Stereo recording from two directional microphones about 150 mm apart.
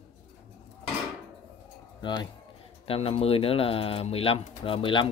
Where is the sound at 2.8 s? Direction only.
40° left (ahead or behind).